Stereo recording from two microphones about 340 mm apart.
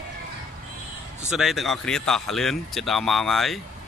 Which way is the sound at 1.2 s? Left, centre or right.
Centre.